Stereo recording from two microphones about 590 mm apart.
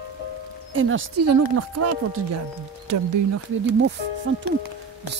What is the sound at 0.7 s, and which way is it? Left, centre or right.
Speech, centre.